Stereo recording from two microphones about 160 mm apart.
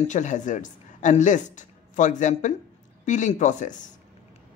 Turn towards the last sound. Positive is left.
turn(degrees=50)  # may be behind; listen again after turning